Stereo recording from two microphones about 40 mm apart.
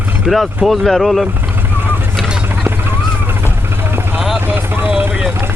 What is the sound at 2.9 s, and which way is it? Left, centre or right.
Vehicle, right.